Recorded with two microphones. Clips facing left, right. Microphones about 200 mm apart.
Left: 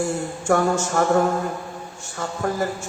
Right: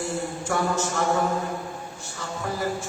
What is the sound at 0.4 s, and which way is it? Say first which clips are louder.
Speech: left 7 dB; 50° left (ahead or behind).